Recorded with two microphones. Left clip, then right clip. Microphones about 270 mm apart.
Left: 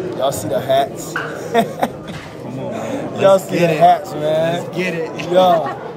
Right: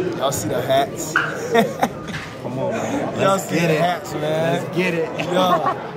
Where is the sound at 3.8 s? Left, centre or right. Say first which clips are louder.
Left 9 dB; left.